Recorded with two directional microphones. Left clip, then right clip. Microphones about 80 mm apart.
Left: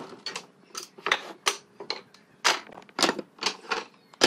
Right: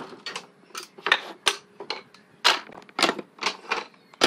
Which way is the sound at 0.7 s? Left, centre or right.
Centre.